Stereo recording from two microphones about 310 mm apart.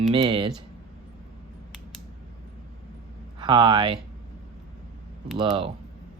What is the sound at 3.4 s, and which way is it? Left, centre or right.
Speech, centre.